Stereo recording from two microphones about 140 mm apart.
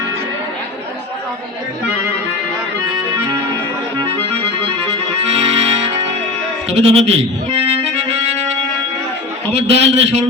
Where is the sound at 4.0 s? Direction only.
45° right (ahead or behind).